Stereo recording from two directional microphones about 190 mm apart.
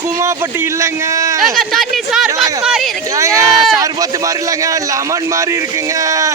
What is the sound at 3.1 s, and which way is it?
A man's voice, 15° right (ahead or behind).